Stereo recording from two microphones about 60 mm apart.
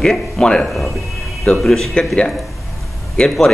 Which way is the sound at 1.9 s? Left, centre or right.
Centre.